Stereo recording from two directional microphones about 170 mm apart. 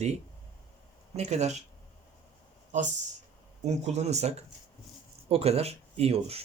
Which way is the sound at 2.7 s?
45° right (ahead or behind).